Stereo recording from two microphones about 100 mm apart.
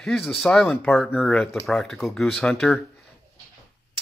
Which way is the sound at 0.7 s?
15° left (ahead or behind).